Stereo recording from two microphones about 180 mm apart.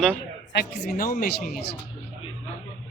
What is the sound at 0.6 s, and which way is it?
Speech, 55° left (ahead or behind).